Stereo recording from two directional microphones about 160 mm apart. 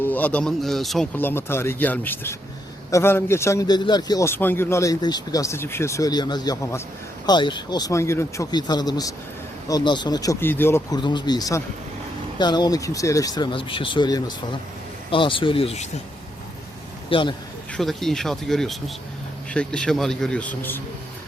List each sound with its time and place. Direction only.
0.0 s speech: 10° left (ahead or behind)
1.2 s a man's voice: 15° left (ahead or behind)
7.3 s a man's voice: 30° left (ahead or behind)
11.0 s a man's voice: 30° left (ahead or behind)
17.1 s speech: 30° left (ahead or behind)
17.7 s a man's voice: centre (ahead or behind)